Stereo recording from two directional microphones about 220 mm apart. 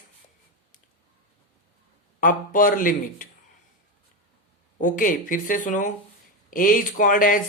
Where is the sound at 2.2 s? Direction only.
40° left (ahead or behind).